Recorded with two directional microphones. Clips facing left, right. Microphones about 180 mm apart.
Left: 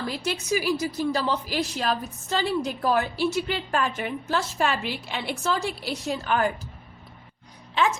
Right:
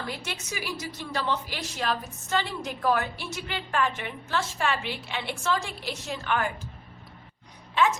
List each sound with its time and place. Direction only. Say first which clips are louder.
0.3 s a woman's voice: left 10 dB; 40° left (ahead or behind)